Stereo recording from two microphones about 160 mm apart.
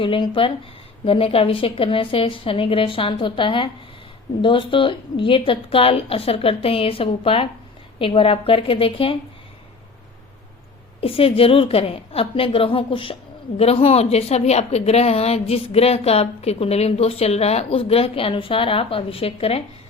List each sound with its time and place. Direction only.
0.0 s a woman's voice: 30° left (ahead or behind)
11.0 s a woman's voice: 35° left (ahead or behind)